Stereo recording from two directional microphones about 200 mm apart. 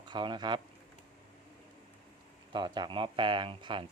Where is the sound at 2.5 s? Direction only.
25° right (ahead or behind).